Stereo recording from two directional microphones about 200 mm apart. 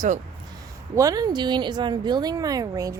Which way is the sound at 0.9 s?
15° right (ahead or behind).